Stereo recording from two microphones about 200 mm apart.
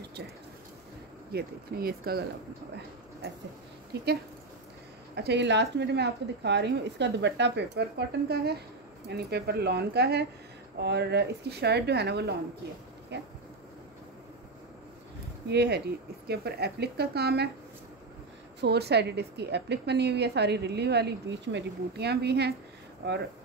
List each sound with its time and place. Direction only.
1.3 s a woman's voice: 50° right (ahead or behind)
3.9 s a woman's voice: 55° right (ahead or behind)
5.1 s a woman's voice: 55° right (ahead or behind)
9.1 s a woman's voice: 55° right (ahead or behind)
15.4 s a woman's voice: 55° right (ahead or behind)
18.6 s a woman's voice: 55° right (ahead or behind)